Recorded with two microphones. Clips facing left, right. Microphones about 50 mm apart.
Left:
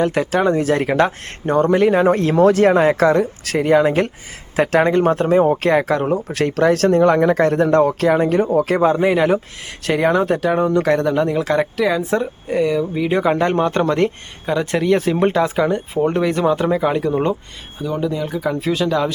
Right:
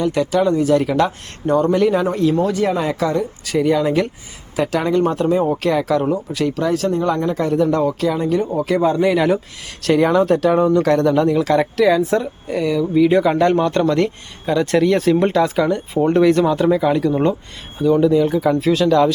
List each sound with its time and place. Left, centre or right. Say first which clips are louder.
0.0 s speech: even; left
2.0 s speech: left 2 dB; left
2.3 s speech: left 5 dB; left
6.2 s speech: left 3 dB; left
8.9 s speech: even; left
17.8 s speech: right 8 dB; centre
18.5 s speech: right 3 dB; centre